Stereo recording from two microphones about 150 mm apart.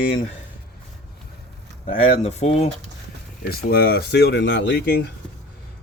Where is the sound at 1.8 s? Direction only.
45° left (ahead or behind).